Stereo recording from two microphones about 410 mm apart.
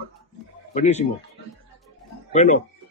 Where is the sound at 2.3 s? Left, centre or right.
Centre.